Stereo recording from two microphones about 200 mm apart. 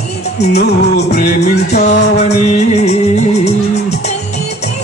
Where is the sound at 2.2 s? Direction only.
35° left (ahead or behind).